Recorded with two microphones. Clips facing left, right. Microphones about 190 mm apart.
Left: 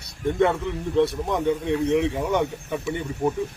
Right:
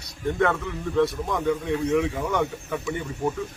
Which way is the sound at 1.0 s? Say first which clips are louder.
Left 2 dB; 25° left (ahead or behind).